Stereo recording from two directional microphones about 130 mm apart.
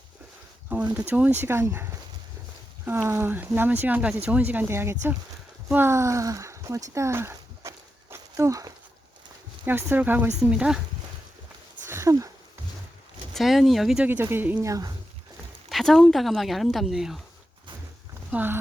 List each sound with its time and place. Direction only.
0.7 s speech: 15° right (ahead or behind)
8.1 s a sound: 25° right (ahead or behind)
9.6 s speech: 15° right (ahead or behind)
11.9 s a sound: 20° right (ahead or behind)
13.3 s speech: centre (ahead or behind)
14.1 s speech: 15° right (ahead or behind)
14.7 s speech: 30° right (ahead or behind)
15.7 s speech: centre (ahead or behind)
18.3 s speech: 15° right (ahead or behind)